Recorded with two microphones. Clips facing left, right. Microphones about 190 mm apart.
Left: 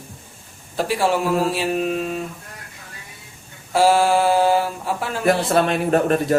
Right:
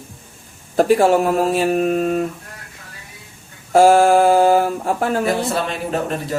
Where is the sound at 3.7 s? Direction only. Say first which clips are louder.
Right 5 dB; 45° right (ahead or behind).